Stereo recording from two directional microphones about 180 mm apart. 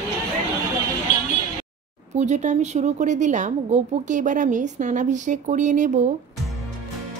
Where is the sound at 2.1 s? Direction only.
40° right (ahead or behind).